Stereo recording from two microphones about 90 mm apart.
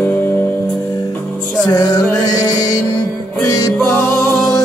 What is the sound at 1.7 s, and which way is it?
Music, 40° left (ahead or behind).